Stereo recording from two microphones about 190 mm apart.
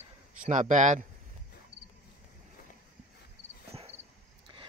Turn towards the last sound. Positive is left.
turn(degrees=-30)  # may be behind; listen again after turning